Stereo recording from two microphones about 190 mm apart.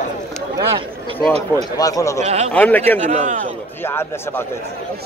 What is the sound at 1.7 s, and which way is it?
Speech, 20° left (ahead or behind).